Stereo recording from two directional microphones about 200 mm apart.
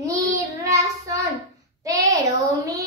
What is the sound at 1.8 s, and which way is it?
Child singing, 15° right (ahead or behind).